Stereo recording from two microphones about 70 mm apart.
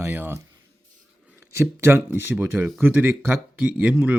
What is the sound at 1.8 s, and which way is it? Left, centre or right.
Speech, right.